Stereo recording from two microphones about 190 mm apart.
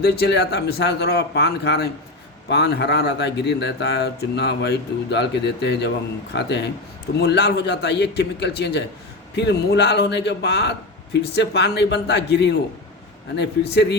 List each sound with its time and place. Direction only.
0.0 s speech: 60° left (ahead or behind)